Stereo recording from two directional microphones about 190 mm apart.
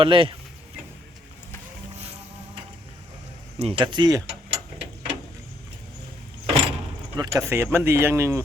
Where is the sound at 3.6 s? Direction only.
30° right (ahead or behind).